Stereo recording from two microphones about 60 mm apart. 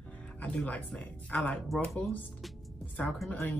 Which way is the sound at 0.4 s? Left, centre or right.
Left.